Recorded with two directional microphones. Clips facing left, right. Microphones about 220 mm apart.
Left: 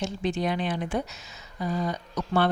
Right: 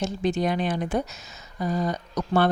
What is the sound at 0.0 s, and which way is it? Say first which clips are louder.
A woman's voice: right 3 dB; 45° right (ahead or behind).